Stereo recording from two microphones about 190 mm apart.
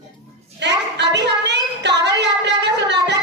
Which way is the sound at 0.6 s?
65° right (ahead or behind).